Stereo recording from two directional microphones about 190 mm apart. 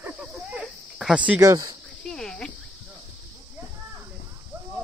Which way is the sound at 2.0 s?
Centre (ahead or behind).